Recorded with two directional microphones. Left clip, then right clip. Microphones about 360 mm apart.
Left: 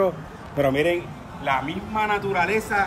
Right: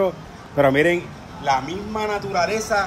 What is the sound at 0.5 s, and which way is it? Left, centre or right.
Speech, right.